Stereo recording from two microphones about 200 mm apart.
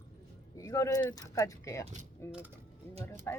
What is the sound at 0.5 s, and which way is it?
Speech, 15° left (ahead or behind).